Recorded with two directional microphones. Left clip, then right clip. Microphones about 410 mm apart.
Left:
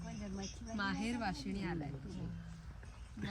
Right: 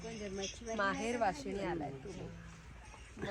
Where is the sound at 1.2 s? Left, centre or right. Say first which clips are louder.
Right 6 dB; centre.